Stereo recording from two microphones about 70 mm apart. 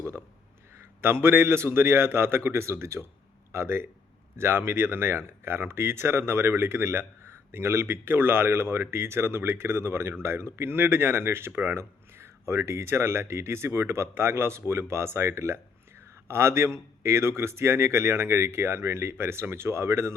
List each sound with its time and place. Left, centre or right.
1.0 s speech: right